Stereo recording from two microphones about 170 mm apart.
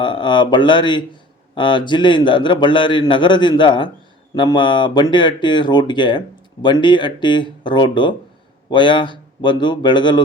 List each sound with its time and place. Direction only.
0.0 s speech: 25° left (ahead or behind)